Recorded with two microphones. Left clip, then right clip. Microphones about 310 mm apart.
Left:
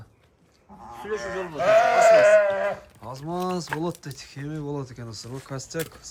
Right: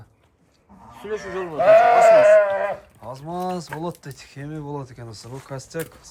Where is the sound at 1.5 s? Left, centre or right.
Right.